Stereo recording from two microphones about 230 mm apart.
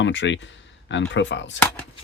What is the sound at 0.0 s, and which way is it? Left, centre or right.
Speech, left.